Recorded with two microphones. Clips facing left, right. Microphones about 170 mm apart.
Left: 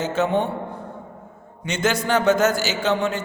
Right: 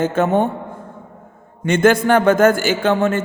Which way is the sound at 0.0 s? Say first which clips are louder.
Right 5 dB; 50° right (ahead or behind).